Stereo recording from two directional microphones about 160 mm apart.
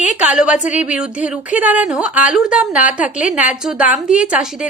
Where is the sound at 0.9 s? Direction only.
5° right (ahead or behind).